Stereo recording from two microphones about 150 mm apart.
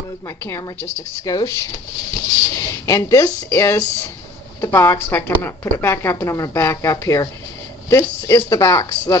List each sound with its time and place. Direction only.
0.5 s speech: 15° left (ahead or behind)
2.5 s speech: 20° left (ahead or behind)